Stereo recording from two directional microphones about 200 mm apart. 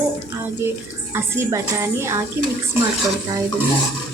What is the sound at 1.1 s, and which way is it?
Speech, 15° right (ahead or behind).